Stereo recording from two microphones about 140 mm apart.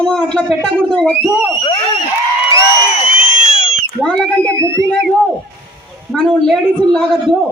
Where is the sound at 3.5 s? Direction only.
40° left (ahead or behind).